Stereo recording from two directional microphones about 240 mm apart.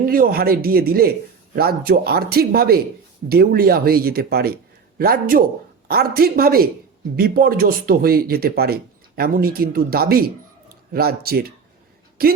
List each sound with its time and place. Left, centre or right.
0.1 s speech: right